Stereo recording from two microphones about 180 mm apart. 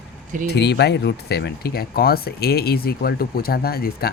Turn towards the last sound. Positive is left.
turn(degrees=55)  # may be behind; listen again after turning